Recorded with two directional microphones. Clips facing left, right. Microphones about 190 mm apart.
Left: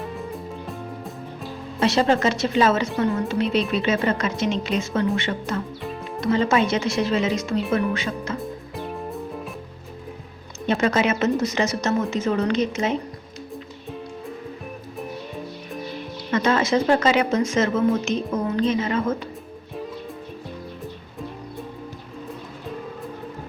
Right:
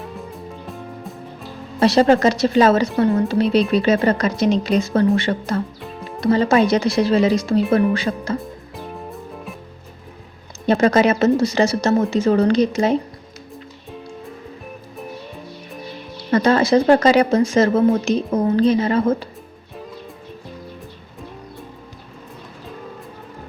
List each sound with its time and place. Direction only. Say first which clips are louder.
0.0 s music: left 1 dB; centre (ahead or behind)
1.8 s a woman's voice: right 6 dB; 40° right (ahead or behind)
5.8 s music: left 1 dB; centre (ahead or behind)
6.1 s a woman's voice: right 5 dB; 35° right (ahead or behind)
8.7 s music: left 1 dB; centre (ahead or behind)
10.7 s a woman's voice: right 6 dB; 35° right (ahead or behind)
16.3 s a woman's voice: right 5 dB; 35° right (ahead or behind)